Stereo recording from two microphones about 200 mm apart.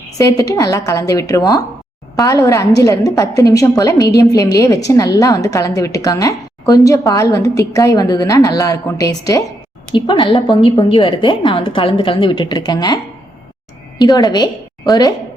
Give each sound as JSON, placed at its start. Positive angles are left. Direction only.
{"t": 0.2, "sound": "a woman's voice", "side_deg": 15}
{"t": 14.0, "sound": "a woman's voice", "side_deg": 20}